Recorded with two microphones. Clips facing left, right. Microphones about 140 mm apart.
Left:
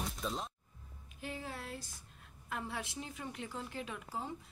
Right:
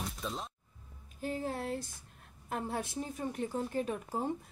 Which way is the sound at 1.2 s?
45° right (ahead or behind).